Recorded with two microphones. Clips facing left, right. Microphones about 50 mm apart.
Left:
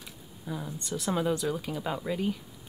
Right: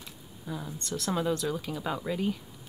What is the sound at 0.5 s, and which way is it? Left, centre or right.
Speech, centre.